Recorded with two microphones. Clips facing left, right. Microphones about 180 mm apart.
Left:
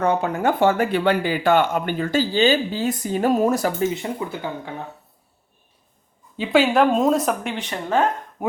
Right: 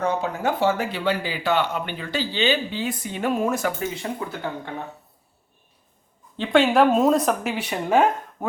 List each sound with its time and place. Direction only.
0.0 s speech: 55° left (ahead or behind); by 3.8 s 35° left (ahead or behind)
3.9 s speech: 20° left (ahead or behind)
6.3 s speech: 5° left (ahead or behind)
8.4 s dog: 10° left (ahead or behind)